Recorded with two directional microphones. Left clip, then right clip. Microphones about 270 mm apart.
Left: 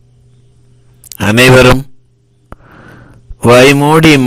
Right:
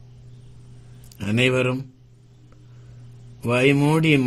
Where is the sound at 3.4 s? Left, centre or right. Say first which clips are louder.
Left 14 dB; left.